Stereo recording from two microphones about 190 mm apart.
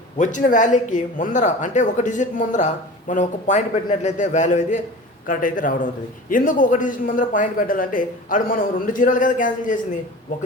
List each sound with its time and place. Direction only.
0.2 s a man's voice: 40° left (ahead or behind)